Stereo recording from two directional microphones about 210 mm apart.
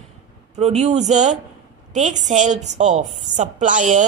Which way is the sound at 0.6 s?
30° right (ahead or behind).